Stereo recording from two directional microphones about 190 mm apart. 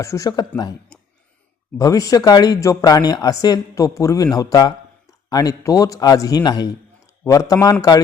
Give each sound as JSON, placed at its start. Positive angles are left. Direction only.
{"t": 0.0, "sound": "a woman's voice", "side_deg": 15}
{"t": 0.9, "sound": "a sound", "side_deg": 5}
{"t": 1.8, "sound": "speech", "side_deg": 20}